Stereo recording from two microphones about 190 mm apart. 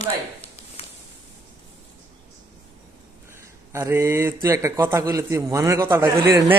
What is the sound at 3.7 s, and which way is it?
A man's voice, 15° right (ahead or behind).